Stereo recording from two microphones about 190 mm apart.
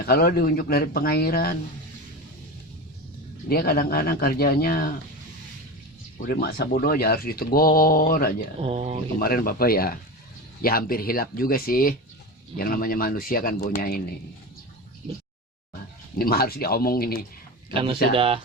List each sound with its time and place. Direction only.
0.0 s speech: 55° left (ahead or behind)
3.5 s speech: 55° left (ahead or behind)
6.1 s speech: 55° left (ahead or behind)
8.6 s speech: 35° right (ahead or behind)
9.1 s speech: 50° left (ahead or behind)
16.1 s speech: 50° left (ahead or behind)
17.7 s speech: 30° right (ahead or behind)